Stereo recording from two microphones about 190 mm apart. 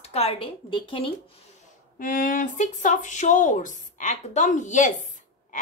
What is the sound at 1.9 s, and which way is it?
A woman's voice, 45° left (ahead or behind).